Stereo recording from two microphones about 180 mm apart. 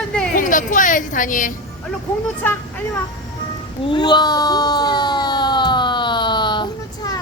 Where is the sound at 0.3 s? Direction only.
45° left (ahead or behind).